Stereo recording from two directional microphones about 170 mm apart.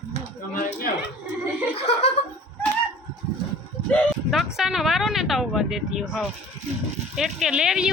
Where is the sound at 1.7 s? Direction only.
35° left (ahead or behind).